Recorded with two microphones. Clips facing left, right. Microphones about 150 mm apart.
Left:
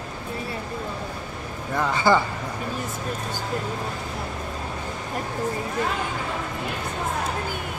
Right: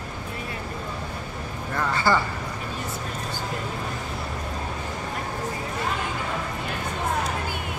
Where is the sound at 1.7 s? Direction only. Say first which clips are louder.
Left 3 dB; 15° left (ahead or behind).